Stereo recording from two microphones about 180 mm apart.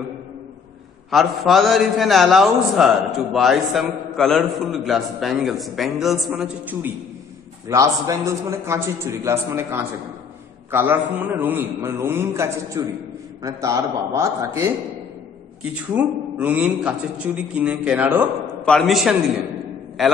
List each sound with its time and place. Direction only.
1.1 s a man's voice: centre (ahead or behind); by 14.7 s 15° right (ahead or behind)
15.9 s a man's voice: 10° right (ahead or behind)